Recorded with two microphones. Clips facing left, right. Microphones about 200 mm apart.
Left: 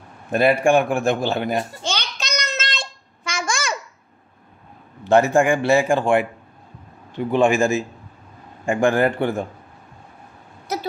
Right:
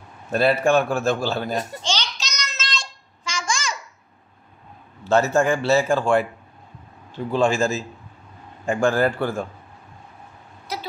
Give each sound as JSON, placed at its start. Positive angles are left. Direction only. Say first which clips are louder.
{"t": 0.3, "sound": "a man's voice", "louder": "left 2 dB", "side_deg": 15}
{"t": 1.8, "sound": "child singing", "louder": "even", "side_deg": 55}
{"t": 5.0, "sound": "a man's voice", "louder": "left 3 dB", "side_deg": 15}
{"t": 10.7, "sound": "vehicle", "louder": "left 5 dB", "side_deg": 45}